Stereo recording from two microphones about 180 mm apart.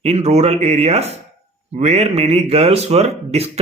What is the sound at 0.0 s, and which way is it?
Speech, 35° right (ahead or behind).